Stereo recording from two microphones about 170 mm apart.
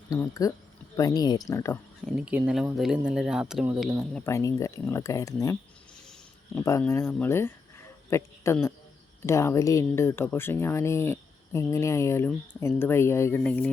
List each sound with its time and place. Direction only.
0.1 s speech: 20° left (ahead or behind)
2.1 s speech: 5° right (ahead or behind)
4.1 s speech: 15° left (ahead or behind)
6.1 s a sound: 5° left (ahead or behind)
6.7 s speech: 15° left (ahead or behind)